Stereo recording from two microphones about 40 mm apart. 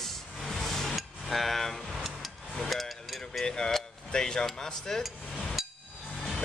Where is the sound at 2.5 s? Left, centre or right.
Centre.